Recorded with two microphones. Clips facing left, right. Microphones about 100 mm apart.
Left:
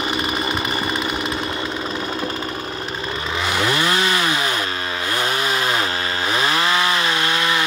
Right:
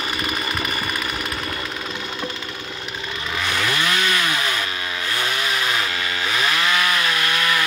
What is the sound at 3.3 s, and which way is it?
Chainsaw, 25° left (ahead or behind).